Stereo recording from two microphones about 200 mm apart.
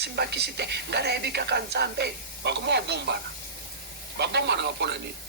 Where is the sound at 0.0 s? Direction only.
55° right (ahead or behind).